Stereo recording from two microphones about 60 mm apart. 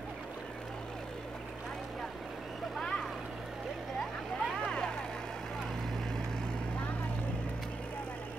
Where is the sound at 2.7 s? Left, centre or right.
Centre.